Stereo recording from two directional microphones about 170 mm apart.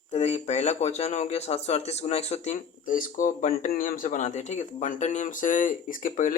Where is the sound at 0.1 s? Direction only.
40° left (ahead or behind).